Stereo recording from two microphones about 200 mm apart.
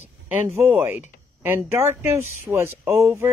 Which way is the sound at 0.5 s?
5° right (ahead or behind).